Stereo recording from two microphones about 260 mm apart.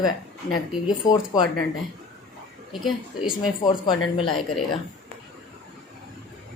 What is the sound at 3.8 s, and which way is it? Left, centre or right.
Speech, centre.